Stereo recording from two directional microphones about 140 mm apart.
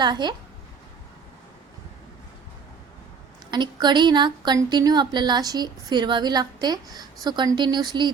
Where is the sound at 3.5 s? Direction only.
30° right (ahead or behind).